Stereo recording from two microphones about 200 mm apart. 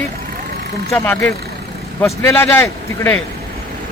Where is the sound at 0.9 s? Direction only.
10° left (ahead or behind).